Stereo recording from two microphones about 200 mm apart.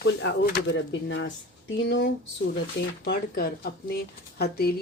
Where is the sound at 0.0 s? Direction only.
55° left (ahead or behind).